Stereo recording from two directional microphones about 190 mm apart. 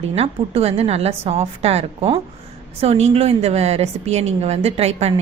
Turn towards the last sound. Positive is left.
turn(degrees=-35)  # may be behind; listen again after turning